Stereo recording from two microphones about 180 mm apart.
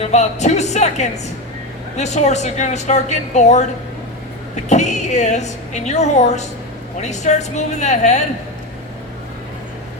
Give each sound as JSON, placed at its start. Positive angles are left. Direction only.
{"t": 0.0, "sound": "a woman's voice", "side_deg": 40}
{"t": 4.7, "sound": "a woman's voice", "side_deg": 40}